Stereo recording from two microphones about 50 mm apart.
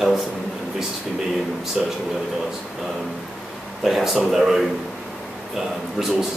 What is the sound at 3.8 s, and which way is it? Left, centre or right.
Speech, centre.